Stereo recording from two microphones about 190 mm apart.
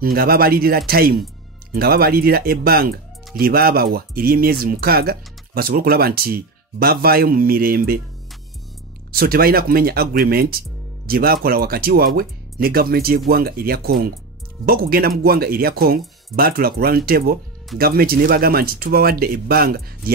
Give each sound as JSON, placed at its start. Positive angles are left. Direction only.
{"t": 0.0, "sound": "speech", "side_deg": -50}
{"t": 9.1, "sound": "speech", "side_deg": -50}